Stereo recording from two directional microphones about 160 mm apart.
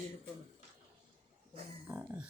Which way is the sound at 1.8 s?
10° right (ahead or behind).